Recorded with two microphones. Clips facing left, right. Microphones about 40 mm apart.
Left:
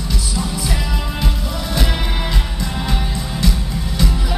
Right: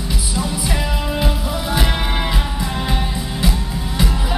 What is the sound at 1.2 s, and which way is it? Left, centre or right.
Music, centre.